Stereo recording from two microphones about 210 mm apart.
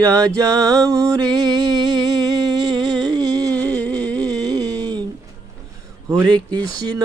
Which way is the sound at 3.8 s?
5° left (ahead or behind).